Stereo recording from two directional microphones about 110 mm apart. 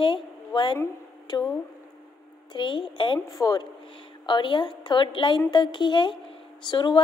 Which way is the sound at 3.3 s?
35° left (ahead or behind).